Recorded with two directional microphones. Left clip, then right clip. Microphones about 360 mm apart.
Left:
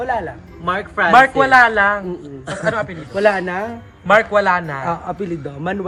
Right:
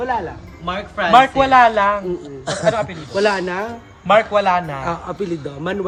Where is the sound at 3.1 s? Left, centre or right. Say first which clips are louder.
Left 2 dB; left.